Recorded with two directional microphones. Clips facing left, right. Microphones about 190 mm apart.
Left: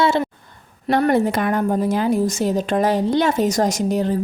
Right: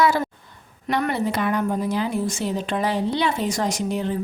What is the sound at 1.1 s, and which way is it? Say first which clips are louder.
Speech: left 5 dB; 50° left (ahead or behind).